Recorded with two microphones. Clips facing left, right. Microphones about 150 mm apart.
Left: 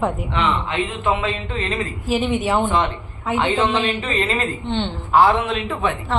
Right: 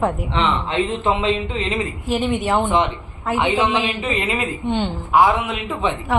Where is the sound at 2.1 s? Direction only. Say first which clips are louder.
Even; centre (ahead or behind).